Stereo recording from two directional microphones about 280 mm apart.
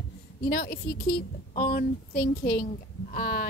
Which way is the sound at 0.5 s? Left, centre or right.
Left.